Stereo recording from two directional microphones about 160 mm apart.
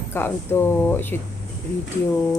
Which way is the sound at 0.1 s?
15° left (ahead or behind).